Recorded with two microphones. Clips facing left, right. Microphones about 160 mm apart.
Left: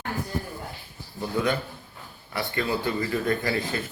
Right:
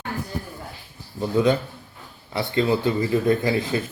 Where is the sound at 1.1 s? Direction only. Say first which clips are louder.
Right 6 dB; 20° right (ahead or behind).